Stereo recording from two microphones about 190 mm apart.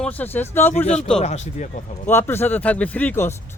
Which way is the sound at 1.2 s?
35° left (ahead or behind).